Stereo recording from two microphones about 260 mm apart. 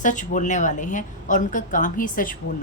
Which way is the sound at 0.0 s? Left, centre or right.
Left.